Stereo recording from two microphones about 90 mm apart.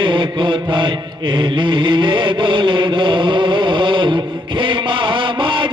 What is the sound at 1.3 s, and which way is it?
Chant, 60° right (ahead or behind).